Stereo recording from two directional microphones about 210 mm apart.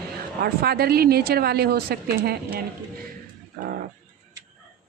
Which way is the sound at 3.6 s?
45° right (ahead or behind).